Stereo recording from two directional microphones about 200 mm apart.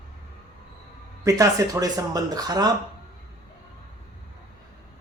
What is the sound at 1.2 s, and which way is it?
Speech, 15° right (ahead or behind).